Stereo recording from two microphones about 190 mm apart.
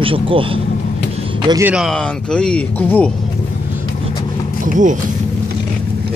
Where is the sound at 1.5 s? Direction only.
15° right (ahead or behind).